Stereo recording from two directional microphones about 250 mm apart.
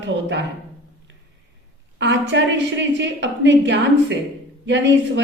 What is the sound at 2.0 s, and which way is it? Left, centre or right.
A man's voice, right.